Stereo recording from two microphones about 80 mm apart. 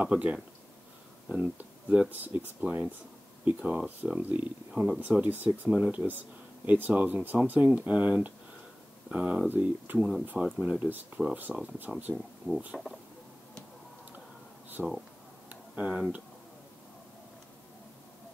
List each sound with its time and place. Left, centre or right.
0.0 s speech: centre
1.6 s speech: centre
9.9 s speech: centre
12.7 s speech: centre
14.8 s speech: centre
15.7 s speech: centre